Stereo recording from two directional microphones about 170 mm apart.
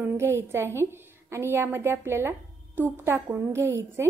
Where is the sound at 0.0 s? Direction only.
15° right (ahead or behind).